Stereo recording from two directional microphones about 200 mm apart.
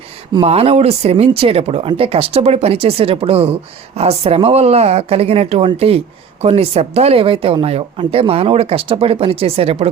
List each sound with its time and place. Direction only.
0.3 s speech: 30° right (ahead or behind)